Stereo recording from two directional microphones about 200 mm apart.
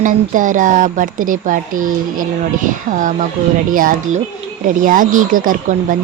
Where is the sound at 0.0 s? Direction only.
40° right (ahead or behind).